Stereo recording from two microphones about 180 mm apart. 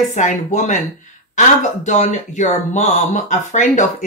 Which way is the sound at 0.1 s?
40° left (ahead or behind).